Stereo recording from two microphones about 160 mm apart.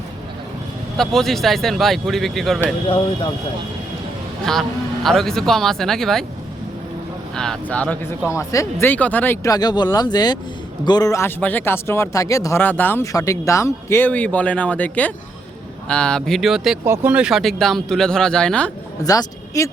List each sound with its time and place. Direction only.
0.9 s speech: centre (ahead or behind)
4.5 s speech: 5° left (ahead or behind)
7.3 s speech: 5° left (ahead or behind)
16.8 s speech: 15° right (ahead or behind); by 18.7 s 5° left (ahead or behind)
19.0 s a man's voice: 20° left (ahead or behind)